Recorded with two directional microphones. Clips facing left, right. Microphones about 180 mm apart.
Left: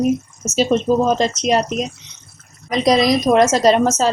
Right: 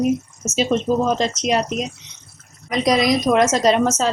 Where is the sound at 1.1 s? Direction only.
40° left (ahead or behind).